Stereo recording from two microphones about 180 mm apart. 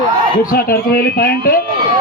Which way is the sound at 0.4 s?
55° left (ahead or behind).